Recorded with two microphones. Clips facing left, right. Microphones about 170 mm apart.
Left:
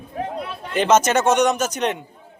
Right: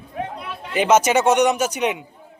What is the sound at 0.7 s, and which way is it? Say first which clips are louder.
Speech: right 1 dB; 10° right (ahead or behind).